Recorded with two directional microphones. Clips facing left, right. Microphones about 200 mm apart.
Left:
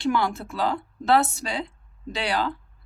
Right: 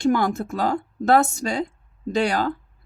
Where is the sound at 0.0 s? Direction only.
45° right (ahead or behind).